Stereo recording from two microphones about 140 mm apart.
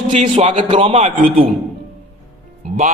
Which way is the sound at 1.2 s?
90° right.